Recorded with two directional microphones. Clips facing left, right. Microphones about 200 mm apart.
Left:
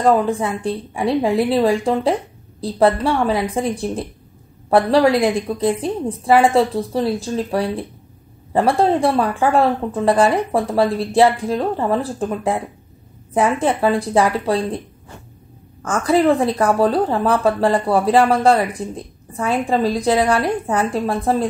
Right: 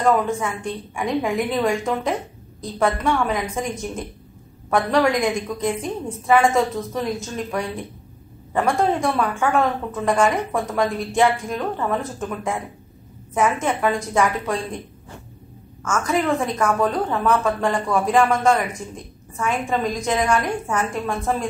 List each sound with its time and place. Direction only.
0.0 s speech: 35° left (ahead or behind)
16.1 s speech: 30° left (ahead or behind)